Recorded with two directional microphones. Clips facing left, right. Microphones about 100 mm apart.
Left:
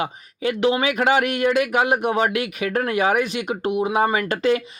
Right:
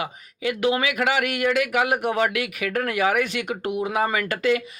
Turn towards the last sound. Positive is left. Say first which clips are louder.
# left 2 dB
turn(degrees=25)  # may be behind; listen again after turning